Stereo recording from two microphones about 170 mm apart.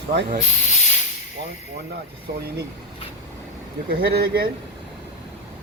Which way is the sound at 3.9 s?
65° right (ahead or behind).